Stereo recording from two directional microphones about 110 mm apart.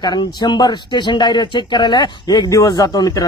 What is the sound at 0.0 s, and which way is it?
A man's voice, 40° left (ahead or behind).